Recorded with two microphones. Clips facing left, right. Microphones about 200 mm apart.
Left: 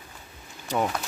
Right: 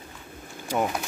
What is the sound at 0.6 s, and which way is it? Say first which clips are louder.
Speech: even; 10° right (ahead or behind).